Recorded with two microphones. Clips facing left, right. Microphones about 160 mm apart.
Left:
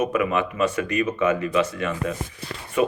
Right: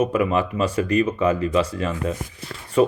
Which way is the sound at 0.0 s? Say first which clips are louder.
Right 2 dB; 30° right (ahead or behind).